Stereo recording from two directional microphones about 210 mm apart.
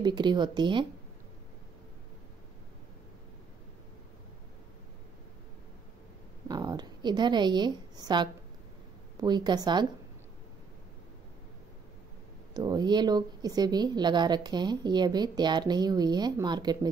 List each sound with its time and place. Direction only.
0.0 s a woman's voice: 20° right (ahead or behind)
6.4 s a woman's voice: 20° right (ahead or behind)
12.5 s a woman's voice: 20° right (ahead or behind)